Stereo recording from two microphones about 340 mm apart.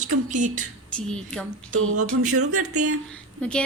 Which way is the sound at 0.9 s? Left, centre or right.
Centre.